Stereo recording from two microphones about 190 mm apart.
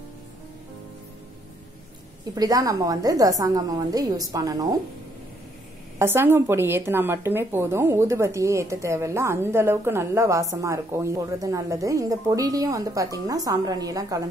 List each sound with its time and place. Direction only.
2.3 s a woman's voice: 20° right (ahead or behind)
5.9 s speech: 10° right (ahead or behind)